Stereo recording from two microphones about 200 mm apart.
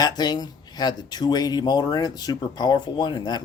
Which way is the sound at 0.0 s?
20° left (ahead or behind).